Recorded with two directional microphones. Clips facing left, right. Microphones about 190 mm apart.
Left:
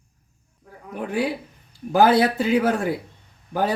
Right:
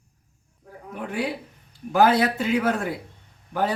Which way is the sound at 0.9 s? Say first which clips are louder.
Left 4 dB; 35° left (ahead or behind).